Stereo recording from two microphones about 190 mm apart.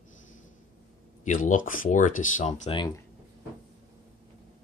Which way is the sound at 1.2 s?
40° left (ahead or behind).